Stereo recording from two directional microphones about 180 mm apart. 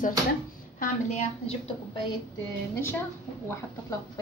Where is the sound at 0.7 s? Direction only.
40° left (ahead or behind).